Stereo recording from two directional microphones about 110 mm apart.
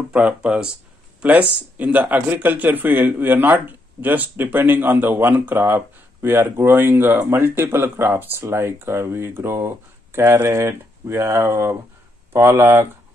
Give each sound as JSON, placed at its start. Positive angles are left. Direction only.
{"t": 0.1, "sound": "speech", "side_deg": -10}